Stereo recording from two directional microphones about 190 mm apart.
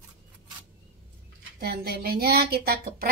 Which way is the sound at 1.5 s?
55° right (ahead or behind).